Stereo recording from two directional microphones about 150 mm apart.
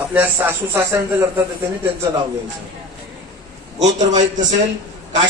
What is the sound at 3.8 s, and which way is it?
Speech, 25° right (ahead or behind).